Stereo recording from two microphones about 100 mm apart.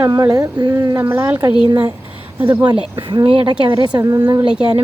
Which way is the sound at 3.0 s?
60° right (ahead or behind).